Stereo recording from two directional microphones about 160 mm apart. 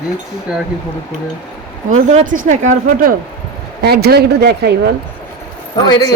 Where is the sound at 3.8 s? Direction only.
85° right.